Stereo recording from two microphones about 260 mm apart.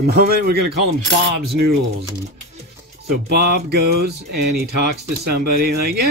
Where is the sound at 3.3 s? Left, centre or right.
Right.